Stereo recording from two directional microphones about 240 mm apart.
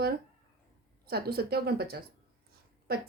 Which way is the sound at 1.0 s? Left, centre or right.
Right.